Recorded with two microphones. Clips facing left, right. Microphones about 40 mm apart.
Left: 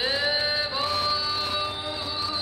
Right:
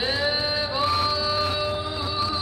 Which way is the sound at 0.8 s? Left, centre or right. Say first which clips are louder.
Right 6 dB; centre.